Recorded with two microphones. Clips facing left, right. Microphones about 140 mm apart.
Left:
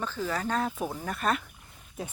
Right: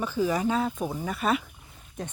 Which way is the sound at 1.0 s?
5° right (ahead or behind).